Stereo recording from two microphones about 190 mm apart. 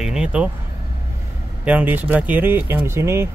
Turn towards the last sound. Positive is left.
turn(degrees=-15)  # may be behind; listen again after turning